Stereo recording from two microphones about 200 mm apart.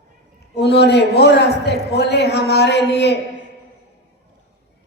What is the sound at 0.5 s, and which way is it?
A man's voice, 55° left (ahead or behind).